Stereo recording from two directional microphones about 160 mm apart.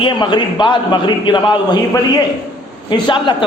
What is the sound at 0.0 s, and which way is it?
A man's voice, 30° left (ahead or behind).